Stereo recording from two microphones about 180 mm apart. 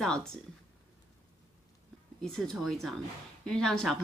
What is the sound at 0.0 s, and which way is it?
Speech, 5° left (ahead or behind).